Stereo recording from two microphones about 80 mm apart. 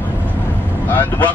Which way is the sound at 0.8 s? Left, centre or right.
Left.